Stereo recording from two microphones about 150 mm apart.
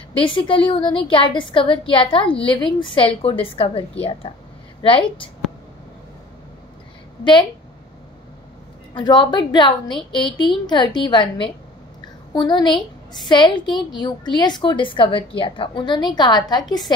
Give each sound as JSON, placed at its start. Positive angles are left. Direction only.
{"t": 0.1, "sound": "a woman's voice", "side_deg": 35}
{"t": 8.9, "sound": "a woman's voice", "side_deg": 30}